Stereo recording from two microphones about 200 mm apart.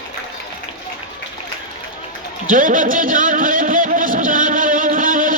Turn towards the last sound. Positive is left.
turn(degrees=-45)  # may be behind; listen again after turning